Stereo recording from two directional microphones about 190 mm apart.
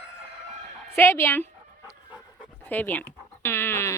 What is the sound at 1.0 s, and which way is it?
Speech, 15° left (ahead or behind).